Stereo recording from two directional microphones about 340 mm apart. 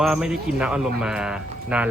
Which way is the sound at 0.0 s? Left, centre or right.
Centre.